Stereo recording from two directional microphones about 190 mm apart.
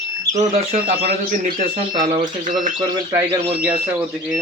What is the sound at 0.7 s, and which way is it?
A man's voice, 50° right (ahead or behind).